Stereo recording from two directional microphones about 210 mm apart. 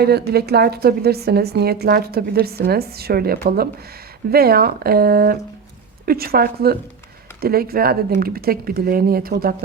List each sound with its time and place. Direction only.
0.0 s a woman's voice: 50° right (ahead or behind)